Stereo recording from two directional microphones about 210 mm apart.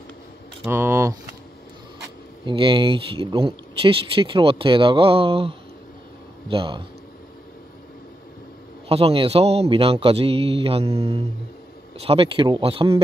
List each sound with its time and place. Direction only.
0.7 s speech: 10° right (ahead or behind)
2.4 s speech: 25° right (ahead or behind)
8.8 s speech: 25° right (ahead or behind)